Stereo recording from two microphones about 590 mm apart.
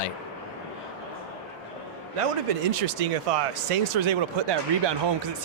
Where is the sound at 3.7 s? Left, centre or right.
Right.